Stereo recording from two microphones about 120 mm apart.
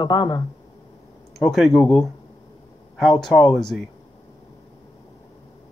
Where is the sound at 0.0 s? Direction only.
40° left (ahead or behind).